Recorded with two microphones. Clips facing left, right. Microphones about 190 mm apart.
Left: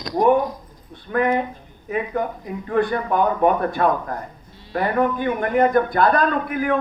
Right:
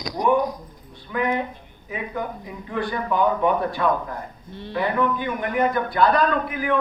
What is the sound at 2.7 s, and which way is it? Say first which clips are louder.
A man's voice: left 5 dB; 55° left (ahead or behind).